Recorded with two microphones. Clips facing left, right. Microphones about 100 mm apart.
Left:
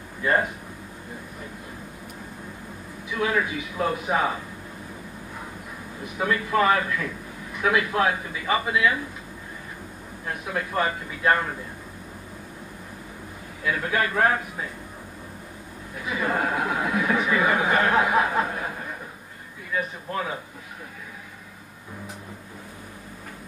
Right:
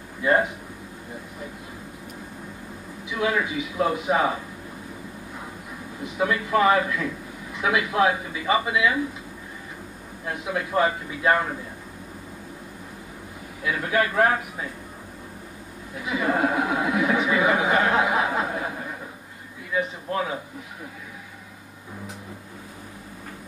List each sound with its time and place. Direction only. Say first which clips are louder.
0.2 s speech: right 2 dB; 15° right (ahead or behind)
3.1 s a man's voice: even; 15° right (ahead or behind)
6.0 s a man's voice: right 1 dB; 20° right (ahead or behind)
10.2 s speech: right 1 dB; 15° right (ahead or behind)
13.7 s a man's voice: right 2 dB; 15° right (ahead or behind)
16.0 s speech: right 3 dB; 20° right (ahead or behind)
19.7 s a man's voice: right 2 dB; 15° right (ahead or behind)